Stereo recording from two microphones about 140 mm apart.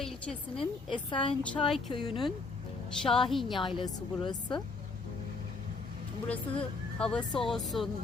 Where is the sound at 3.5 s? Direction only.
35° left (ahead or behind).